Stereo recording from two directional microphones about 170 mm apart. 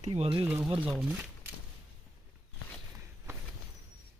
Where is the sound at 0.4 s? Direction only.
10° right (ahead or behind).